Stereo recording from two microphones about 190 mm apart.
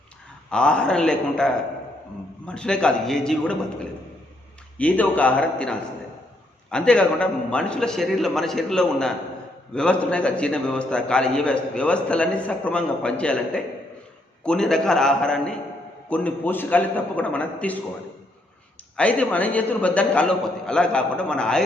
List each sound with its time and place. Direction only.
0.5 s a man's voice: 5° left (ahead or behind)
4.8 s a man's voice: 10° left (ahead or behind)
18.9 s a man's voice: 5° left (ahead or behind)